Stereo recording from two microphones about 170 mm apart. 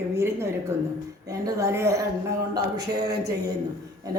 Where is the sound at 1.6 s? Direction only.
15° right (ahead or behind).